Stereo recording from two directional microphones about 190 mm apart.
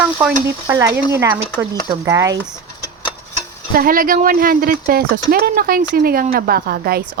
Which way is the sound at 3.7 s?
50° right (ahead or behind).